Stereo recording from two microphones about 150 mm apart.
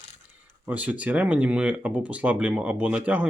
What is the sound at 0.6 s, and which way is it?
Speech, 10° right (ahead or behind).